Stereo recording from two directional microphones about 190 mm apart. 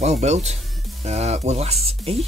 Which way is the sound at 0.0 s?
35° right (ahead or behind).